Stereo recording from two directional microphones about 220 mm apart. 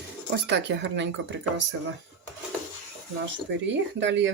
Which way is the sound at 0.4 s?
50° right (ahead or behind).